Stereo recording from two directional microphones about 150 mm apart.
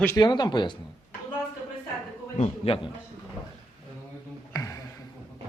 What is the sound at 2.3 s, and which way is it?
Speech, 40° left (ahead or behind).